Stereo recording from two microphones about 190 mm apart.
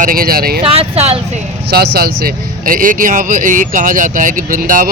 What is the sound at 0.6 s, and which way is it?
Speech, 30° right (ahead or behind).